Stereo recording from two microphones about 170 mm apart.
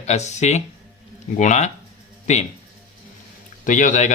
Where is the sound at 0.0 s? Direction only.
40° left (ahead or behind).